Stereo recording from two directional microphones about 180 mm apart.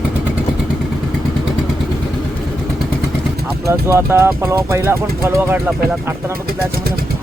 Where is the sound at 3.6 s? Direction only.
15° right (ahead or behind).